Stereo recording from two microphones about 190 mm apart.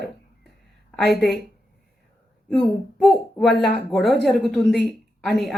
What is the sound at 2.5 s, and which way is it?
Speech, centre (ahead or behind).